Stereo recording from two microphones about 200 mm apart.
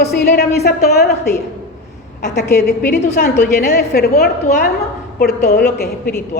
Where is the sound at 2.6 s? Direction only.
55° left (ahead or behind).